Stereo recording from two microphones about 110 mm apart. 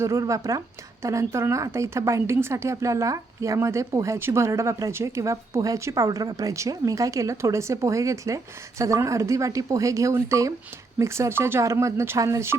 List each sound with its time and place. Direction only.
0.0 s speech: 30° right (ahead or behind)